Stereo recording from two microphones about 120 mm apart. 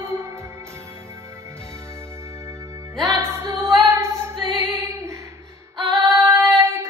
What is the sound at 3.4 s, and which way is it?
Female singing, 25° right (ahead or behind).